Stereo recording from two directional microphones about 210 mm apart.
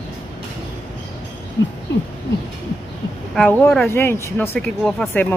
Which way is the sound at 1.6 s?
55° left (ahead or behind).